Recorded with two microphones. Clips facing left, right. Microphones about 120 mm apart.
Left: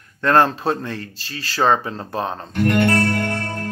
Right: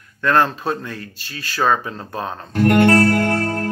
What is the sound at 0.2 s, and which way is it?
Speech, 30° left (ahead or behind).